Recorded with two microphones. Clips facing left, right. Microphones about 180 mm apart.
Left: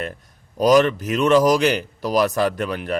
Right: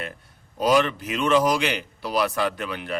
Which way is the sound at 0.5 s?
40° left (ahead or behind).